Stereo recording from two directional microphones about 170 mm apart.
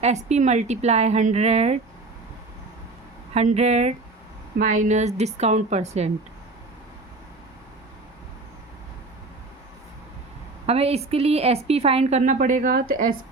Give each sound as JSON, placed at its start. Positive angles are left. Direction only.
{"t": 0.0, "sound": "a woman's voice", "side_deg": -40}
{"t": 3.3, "sound": "a woman's voice", "side_deg": -40}
{"t": 10.7, "sound": "a woman's voice", "side_deg": -35}